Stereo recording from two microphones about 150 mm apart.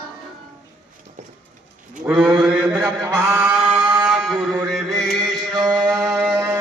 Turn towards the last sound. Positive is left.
turn(degrees=-5)  # may be behind; listen again after turning